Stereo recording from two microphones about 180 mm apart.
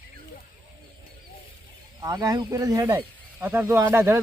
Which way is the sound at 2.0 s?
20° right (ahead or behind).